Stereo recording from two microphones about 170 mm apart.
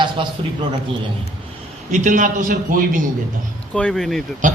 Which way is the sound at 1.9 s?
50° right (ahead or behind).